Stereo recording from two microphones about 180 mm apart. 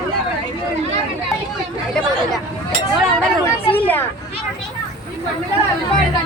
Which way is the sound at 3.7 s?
10° left (ahead or behind).